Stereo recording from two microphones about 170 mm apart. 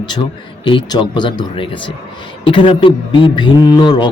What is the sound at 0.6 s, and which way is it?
Speech, 30° left (ahead or behind).